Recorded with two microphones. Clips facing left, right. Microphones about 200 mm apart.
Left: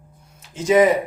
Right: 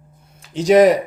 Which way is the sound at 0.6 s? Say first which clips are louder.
Right 4 dB; 75° right (ahead or behind).